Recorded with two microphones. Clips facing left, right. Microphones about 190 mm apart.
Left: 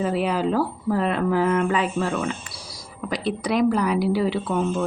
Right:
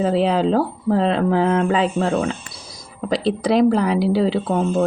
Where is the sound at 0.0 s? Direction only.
30° right (ahead or behind).